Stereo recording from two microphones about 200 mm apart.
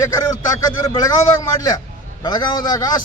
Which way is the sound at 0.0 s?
20° left (ahead or behind).